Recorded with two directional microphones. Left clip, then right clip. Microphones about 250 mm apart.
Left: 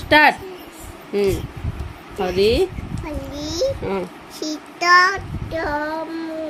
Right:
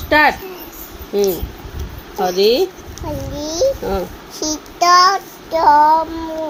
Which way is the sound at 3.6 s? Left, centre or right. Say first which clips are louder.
Right 5 dB; left.